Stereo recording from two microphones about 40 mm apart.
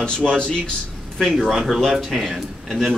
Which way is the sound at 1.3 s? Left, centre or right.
Centre.